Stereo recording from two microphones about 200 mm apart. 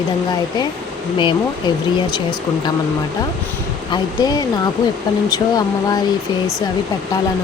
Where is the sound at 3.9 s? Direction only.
20° left (ahead or behind).